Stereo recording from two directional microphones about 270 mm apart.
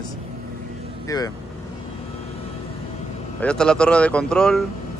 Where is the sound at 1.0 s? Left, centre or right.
Centre.